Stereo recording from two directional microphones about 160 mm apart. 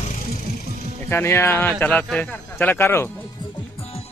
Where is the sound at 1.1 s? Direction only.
15° left (ahead or behind).